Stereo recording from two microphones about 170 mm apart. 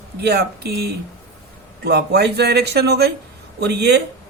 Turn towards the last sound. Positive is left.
turn(degrees=-75)  # may be behind; listen again after turning